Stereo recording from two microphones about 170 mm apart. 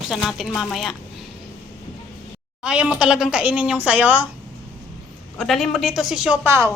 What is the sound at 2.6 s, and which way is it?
A woman's voice, 5° right (ahead or behind).